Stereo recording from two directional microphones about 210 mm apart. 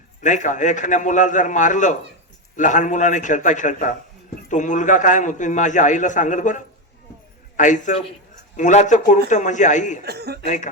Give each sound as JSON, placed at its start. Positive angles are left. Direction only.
{"t": 0.2, "sound": "a man's voice", "side_deg": 35}
{"t": 10.0, "sound": "speech", "side_deg": -50}
{"t": 10.4, "sound": "a man's voice", "side_deg": 35}